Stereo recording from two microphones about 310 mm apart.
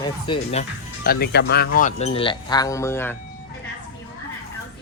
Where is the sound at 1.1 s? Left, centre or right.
Left; by 3.2 s centre.